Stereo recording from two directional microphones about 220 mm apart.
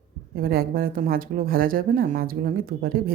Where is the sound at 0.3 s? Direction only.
40° right (ahead or behind).